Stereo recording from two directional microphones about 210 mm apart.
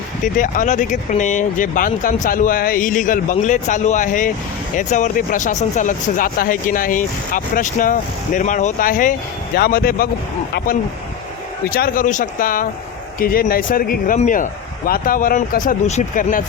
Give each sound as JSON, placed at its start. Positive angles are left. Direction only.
{"t": 0.3, "sound": "speech", "side_deg": 40}
{"t": 11.7, "sound": "speech", "side_deg": 45}